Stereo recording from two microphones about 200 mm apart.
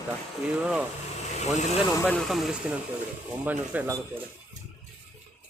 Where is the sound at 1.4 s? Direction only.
35° left (ahead or behind).